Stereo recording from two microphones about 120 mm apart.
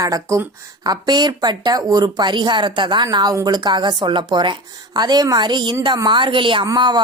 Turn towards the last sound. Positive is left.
turn(degrees=-40)  # may be behind; listen again after turning